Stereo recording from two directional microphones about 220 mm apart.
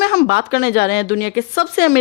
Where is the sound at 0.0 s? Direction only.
45° left (ahead or behind).